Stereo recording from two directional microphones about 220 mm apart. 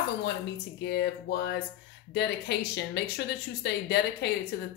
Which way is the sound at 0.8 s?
50° left (ahead or behind).